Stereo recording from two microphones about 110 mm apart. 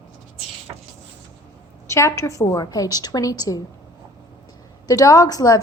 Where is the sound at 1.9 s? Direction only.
25° left (ahead or behind).